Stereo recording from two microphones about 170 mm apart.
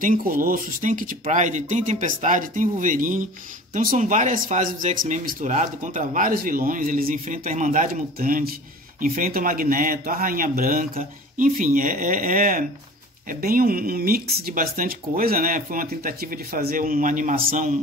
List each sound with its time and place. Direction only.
0.0 s speech: 50° right (ahead or behind)